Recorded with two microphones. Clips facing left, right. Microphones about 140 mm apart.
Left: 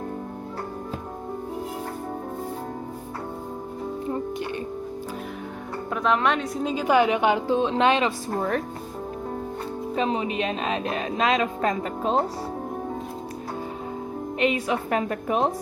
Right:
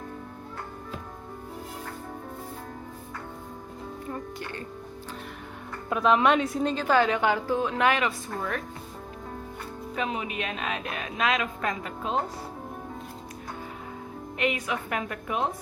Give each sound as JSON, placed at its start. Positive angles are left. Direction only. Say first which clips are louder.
{"t": 4.0, "sound": "music", "louder": "left 7 dB", "side_deg": 20}
{"t": 5.9, "sound": "a woman's voice", "louder": "right 1 dB", "side_deg": -5}
{"t": 6.8, "sound": "speech", "louder": "left 4 dB", "side_deg": 15}
{"t": 8.3, "sound": "speech", "louder": "left 7 dB", "side_deg": 45}
{"t": 9.9, "sound": "speech", "louder": "left 6 dB", "side_deg": 30}
{"t": 14.3, "sound": "a woman's voice", "louder": "left 5 dB", "side_deg": 30}